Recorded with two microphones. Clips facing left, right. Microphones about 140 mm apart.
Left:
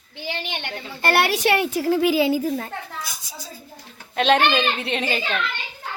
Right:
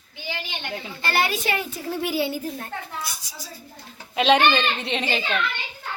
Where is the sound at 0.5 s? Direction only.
60° left (ahead or behind); by 2.0 s 85° left.